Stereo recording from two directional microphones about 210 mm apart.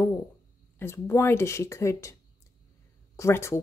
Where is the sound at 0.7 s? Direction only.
10° left (ahead or behind).